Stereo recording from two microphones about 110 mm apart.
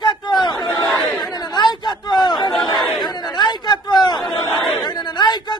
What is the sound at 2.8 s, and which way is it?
Chatter, centre (ahead or behind).